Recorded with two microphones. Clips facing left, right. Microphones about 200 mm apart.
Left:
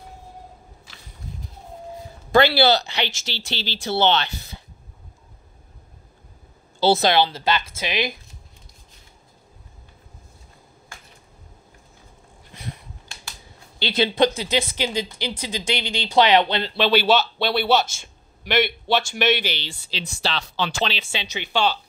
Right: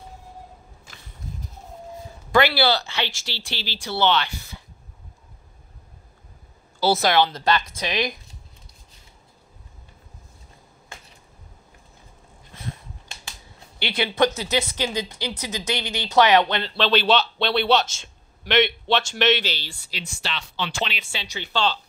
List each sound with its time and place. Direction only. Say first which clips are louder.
2.3 s speech: left 3 dB; 25° left (ahead or behind)
6.8 s speech: left 2 dB; 25° left (ahead or behind)
14.0 s speech: left 1 dB; 30° left (ahead or behind)
16.6 s a man's voice: left 2 dB; 10° left (ahead or behind)
20.0 s speech: left 5 dB; 35° left (ahead or behind); by 21.7 s 15° left (ahead or behind)